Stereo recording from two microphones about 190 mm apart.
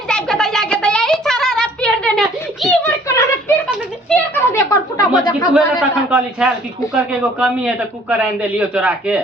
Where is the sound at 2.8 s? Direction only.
15° left (ahead or behind).